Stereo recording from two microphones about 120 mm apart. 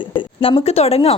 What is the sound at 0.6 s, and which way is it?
Speech, 60° left (ahead or behind).